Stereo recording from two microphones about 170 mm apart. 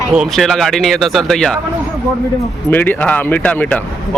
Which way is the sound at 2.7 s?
10° left (ahead or behind).